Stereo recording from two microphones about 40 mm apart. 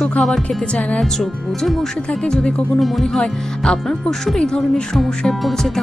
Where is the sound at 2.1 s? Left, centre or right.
Left.